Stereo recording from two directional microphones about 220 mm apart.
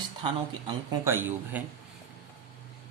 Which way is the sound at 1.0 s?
10° right (ahead or behind).